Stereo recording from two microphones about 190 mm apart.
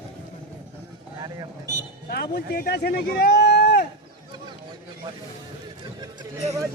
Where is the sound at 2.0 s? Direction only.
55° left (ahead or behind).